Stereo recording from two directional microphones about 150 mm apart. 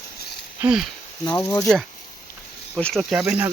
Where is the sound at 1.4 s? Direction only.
25° left (ahead or behind).